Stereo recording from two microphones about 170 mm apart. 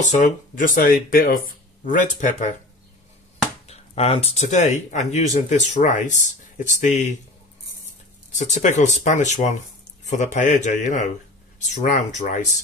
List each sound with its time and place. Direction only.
0.2 s speech: 55° left (ahead or behind)
3.6 s speech: 35° left (ahead or behind)
8.4 s speech: 45° left (ahead or behind)